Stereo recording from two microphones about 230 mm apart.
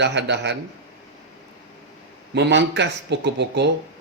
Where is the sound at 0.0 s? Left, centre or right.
Right.